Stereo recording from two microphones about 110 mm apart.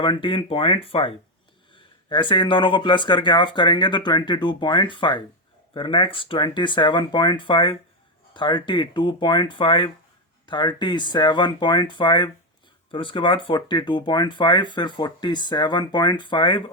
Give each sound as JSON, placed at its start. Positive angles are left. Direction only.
{"t": 0.0, "sound": "speech", "side_deg": 50}